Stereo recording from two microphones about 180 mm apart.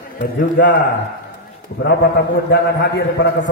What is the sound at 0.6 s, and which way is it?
Speech, 70° left (ahead or behind).